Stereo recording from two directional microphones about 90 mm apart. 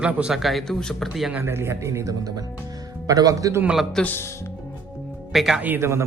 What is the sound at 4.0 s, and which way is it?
Speech, 5° left (ahead or behind).